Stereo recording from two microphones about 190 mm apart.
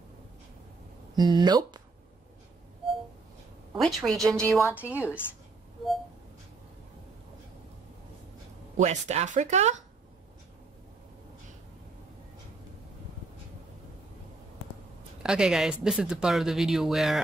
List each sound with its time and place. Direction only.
1.1 s speech: 20° right (ahead or behind)
3.7 s speech: centre (ahead or behind)
4.6 s a woman's voice: 10° right (ahead or behind)
8.7 s speech: 35° right (ahead or behind)
15.2 s speech: 5° right (ahead or behind)